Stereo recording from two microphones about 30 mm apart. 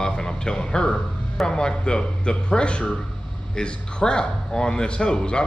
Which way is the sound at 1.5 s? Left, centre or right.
Left.